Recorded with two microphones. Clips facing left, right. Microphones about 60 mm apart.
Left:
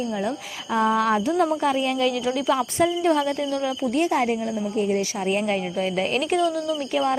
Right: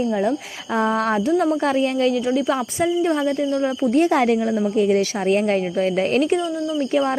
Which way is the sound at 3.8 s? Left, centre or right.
Right.